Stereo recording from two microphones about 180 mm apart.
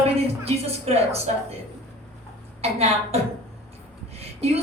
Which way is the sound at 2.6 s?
35° right (ahead or behind).